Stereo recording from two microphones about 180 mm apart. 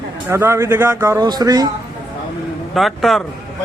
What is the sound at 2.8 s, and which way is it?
Speech, centre (ahead or behind).